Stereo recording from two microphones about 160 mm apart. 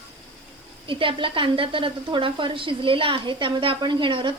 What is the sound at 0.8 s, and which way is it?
Speech, 30° right (ahead or behind).